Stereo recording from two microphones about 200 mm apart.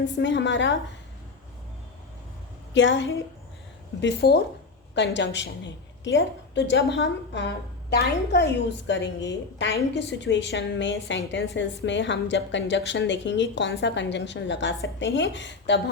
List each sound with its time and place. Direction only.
0.2 s a woman's voice: 65° left (ahead or behind)
2.7 s a woman's voice: 65° left (ahead or behind)
4.0 s a woman's voice: 55° left (ahead or behind)